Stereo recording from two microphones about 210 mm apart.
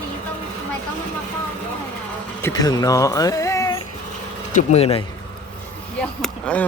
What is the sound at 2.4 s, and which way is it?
Speech, 15° left (ahead or behind).